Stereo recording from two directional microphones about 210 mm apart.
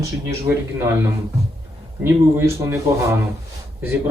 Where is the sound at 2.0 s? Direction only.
10° right (ahead or behind).